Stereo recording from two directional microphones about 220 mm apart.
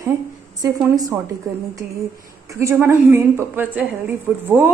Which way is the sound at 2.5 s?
10° right (ahead or behind).